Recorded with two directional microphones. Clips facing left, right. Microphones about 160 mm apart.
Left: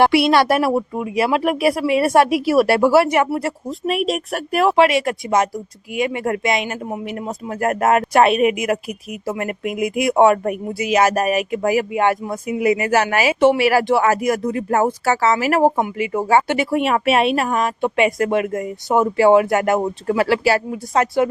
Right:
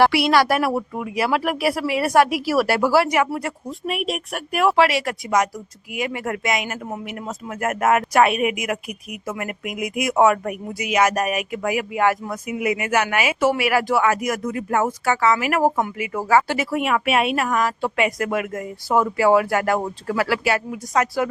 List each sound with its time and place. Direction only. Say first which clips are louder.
0.0 s speech: left 2 dB; 25° left (ahead or behind)
4.7 s speech: left 5 dB; 20° left (ahead or behind)